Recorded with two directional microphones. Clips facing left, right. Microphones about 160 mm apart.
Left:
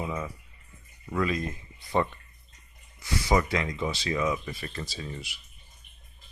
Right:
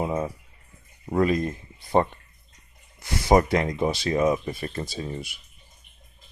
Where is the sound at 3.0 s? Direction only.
50° right (ahead or behind); by 5.2 s 35° right (ahead or behind).